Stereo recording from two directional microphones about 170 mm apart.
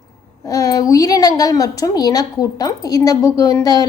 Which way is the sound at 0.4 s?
20° left (ahead or behind).